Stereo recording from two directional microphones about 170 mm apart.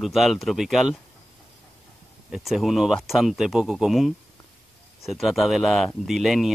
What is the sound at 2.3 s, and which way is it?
Speech, centre (ahead or behind).